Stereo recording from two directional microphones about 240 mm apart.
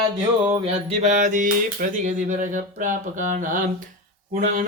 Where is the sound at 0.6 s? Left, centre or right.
Right.